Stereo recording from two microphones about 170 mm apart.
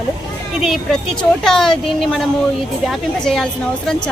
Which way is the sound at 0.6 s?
Centre (ahead or behind).